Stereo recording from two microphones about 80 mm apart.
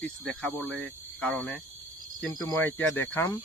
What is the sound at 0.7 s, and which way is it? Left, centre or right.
Speech, centre.